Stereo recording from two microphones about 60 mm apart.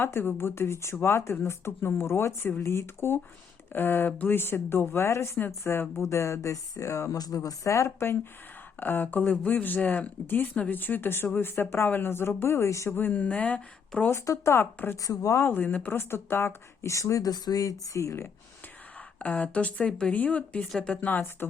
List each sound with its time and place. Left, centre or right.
0.0 s speech: left
7.9 s speech: left
12.9 s speech: left
14.3 s speech: left
15.0 s speech: left
15.5 s speech: left
15.9 s speech: left
19.2 s speech: left